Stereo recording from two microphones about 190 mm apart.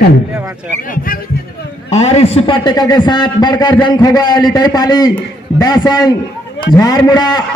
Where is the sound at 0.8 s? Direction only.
50° left (ahead or behind).